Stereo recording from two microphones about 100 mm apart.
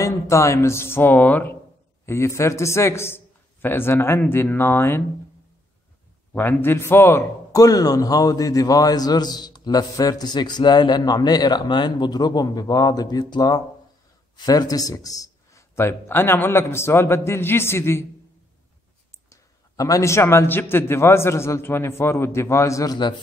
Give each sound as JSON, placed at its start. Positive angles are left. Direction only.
{"t": 0.0, "sound": "a man's voice", "side_deg": 30}
{"t": 2.0, "sound": "a man's voice", "side_deg": 25}
{"t": 6.3, "sound": "a man's voice", "side_deg": 20}
{"t": 19.8, "sound": "a man's voice", "side_deg": 30}
{"t": 22.9, "sound": "a man's voice", "side_deg": 50}